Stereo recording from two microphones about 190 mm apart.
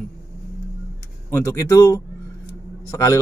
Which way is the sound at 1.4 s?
15° left (ahead or behind).